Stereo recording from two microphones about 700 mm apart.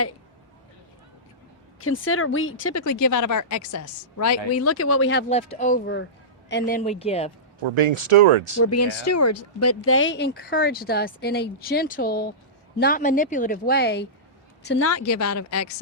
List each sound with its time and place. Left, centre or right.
1.8 s speech: centre
7.8 s speech: right
8.6 s speech: left